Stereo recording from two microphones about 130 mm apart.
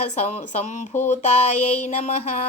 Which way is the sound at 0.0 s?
60° left (ahead or behind).